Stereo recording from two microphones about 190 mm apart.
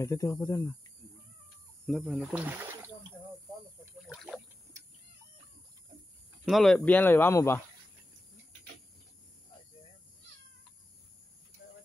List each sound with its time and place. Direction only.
0.0 s speech: 15° left (ahead or behind)
1.9 s speech: centre (ahead or behind)
2.4 s a sound: 10° right (ahead or behind)
4.1 s speech: centre (ahead or behind)
6.4 s speech: centre (ahead or behind)